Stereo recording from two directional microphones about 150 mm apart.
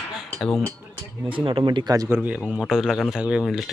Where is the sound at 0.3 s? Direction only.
Centre (ahead or behind).